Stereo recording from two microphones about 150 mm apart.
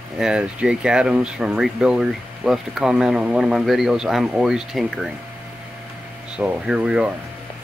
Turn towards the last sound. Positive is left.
turn(degrees=-5)  # may be behind; listen again after turning